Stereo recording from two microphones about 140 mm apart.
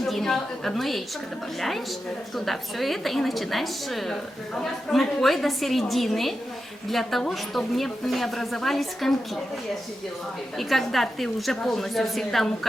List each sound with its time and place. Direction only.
0.0 s a woman's voice: centre (ahead or behind)
2.3 s a woman's voice: centre (ahead or behind)
10.6 s a woman's voice: centre (ahead or behind)